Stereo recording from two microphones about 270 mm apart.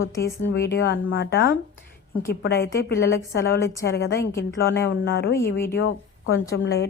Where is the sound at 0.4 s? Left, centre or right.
Left.